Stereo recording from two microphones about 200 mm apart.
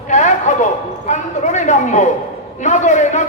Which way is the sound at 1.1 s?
35° left (ahead or behind).